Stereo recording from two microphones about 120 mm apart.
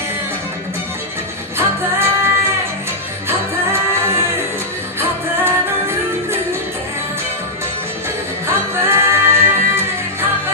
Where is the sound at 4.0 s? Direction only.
20° right (ahead or behind).